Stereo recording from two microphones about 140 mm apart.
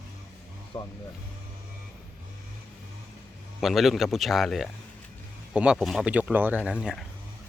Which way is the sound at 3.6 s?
Centre (ahead or behind).